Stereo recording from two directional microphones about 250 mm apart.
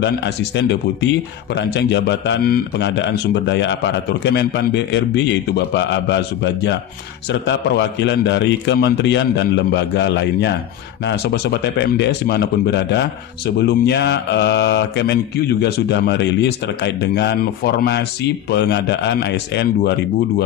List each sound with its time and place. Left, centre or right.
0.0 s mantra: left
11.1 s speech: left
13.6 s mantra: left